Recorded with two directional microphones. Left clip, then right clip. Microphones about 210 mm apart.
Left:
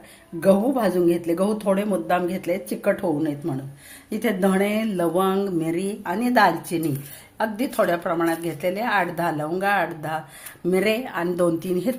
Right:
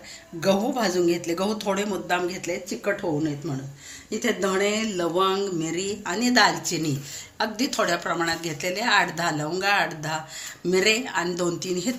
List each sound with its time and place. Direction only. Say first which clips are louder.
0.3 s speech: left 4 dB; 40° left (ahead or behind)